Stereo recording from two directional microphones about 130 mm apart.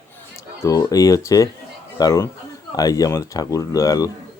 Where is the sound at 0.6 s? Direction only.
25° left (ahead or behind).